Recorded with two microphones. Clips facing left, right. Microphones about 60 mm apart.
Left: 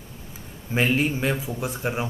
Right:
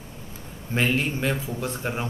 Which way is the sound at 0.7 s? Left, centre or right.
Centre.